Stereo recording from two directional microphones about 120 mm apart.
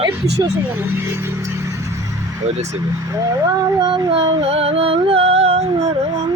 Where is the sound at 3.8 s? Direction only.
40° right (ahead or behind); by 6.1 s 65° right (ahead or behind).